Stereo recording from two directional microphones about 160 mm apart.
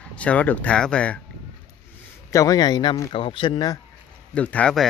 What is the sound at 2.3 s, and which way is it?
Speech, 25° left (ahead or behind).